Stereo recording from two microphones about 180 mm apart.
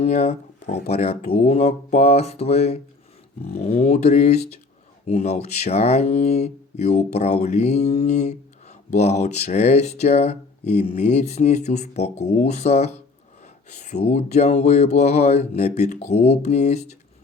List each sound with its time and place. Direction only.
0.0 s speech: 35° left (ahead or behind)